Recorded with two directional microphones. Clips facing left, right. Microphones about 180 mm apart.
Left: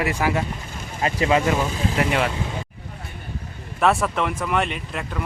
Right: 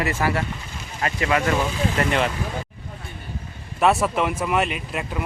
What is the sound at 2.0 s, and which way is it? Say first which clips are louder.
Speech: left 1 dB; 5° left (ahead or behind).